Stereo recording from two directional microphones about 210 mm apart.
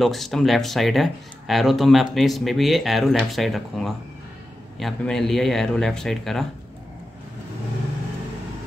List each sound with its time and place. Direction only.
0.0 s speech: centre (ahead or behind)